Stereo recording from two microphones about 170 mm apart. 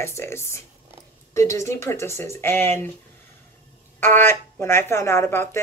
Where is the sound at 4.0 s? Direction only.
15° left (ahead or behind).